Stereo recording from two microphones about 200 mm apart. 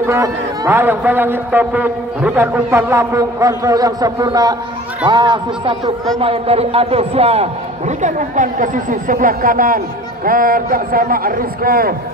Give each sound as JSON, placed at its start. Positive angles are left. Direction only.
{"t": 0.0, "sound": "a man's voice", "side_deg": -15}